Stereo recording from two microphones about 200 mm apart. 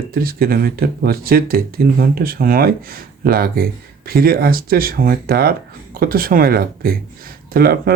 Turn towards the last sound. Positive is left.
turn(degrees=-50)  # may be behind; listen again after turning